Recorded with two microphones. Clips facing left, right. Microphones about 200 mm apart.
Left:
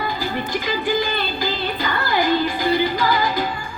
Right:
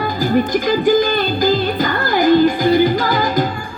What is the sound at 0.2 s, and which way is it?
Music, 45° right (ahead or behind).